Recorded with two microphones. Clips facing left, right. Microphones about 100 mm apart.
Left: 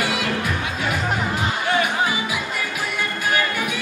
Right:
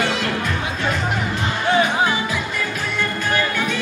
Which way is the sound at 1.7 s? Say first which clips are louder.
Right 4 dB; 20° right (ahead or behind).